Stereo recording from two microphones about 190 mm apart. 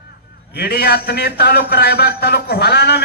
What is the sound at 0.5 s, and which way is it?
A man's voice, 55° left (ahead or behind).